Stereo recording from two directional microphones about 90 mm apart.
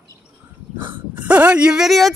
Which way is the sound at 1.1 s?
15° right (ahead or behind).